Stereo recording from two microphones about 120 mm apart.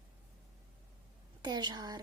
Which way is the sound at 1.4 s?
35° right (ahead or behind).